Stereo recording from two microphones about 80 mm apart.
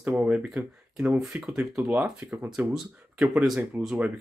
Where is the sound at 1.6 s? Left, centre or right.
Centre.